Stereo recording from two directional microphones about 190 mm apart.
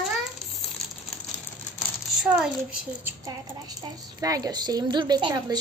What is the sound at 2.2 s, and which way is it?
Speech, 5° right (ahead or behind).